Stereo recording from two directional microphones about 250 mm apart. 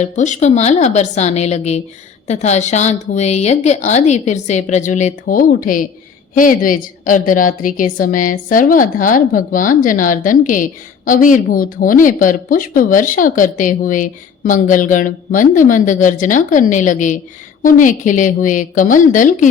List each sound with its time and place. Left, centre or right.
0.0 s a woman's voice: left